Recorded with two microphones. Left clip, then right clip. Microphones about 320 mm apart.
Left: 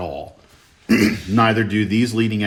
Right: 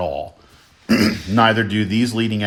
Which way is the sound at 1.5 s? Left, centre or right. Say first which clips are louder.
Even; right.